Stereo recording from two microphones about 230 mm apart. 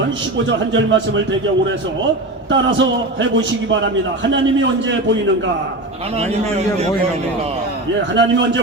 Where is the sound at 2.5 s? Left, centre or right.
Right.